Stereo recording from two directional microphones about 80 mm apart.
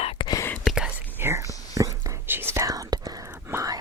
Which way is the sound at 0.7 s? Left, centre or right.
Centre.